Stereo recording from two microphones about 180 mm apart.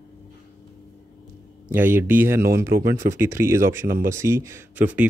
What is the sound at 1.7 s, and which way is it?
Speech, 10° right (ahead or behind).